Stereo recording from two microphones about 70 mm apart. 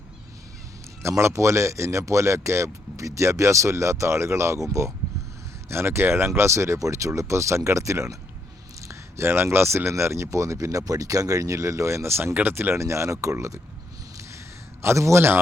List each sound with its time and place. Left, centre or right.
1.0 s a man's voice: right
5.6 s a man's voice: right
12.7 s a man's voice: right
14.8 s speech: right